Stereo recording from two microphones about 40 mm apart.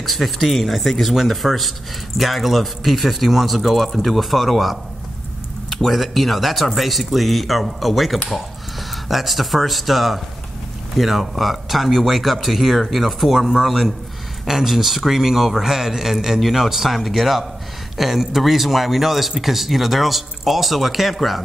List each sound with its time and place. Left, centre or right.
0.0 s speech: centre
5.9 s speech: centre